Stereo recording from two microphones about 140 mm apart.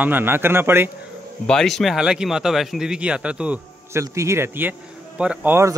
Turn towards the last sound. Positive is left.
turn(degrees=-15)  # may be behind; listen again after turning